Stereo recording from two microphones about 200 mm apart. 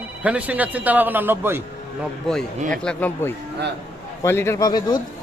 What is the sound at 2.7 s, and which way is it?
A man's voice, 5° left (ahead or behind).